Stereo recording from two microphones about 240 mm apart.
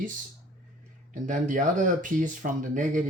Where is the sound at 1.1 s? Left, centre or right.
Right.